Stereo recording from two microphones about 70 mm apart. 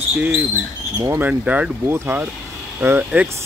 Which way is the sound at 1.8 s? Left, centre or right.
Right.